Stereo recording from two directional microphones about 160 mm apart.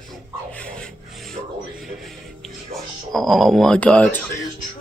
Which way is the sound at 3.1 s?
Centre (ahead or behind).